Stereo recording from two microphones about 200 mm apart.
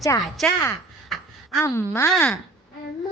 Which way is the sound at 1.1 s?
Centre (ahead or behind).